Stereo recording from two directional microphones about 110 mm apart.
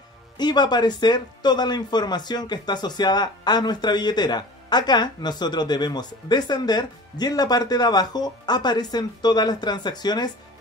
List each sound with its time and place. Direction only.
0.4 s speech: 40° left (ahead or behind)